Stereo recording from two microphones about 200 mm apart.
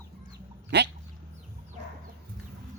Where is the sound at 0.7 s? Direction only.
60° right (ahead or behind).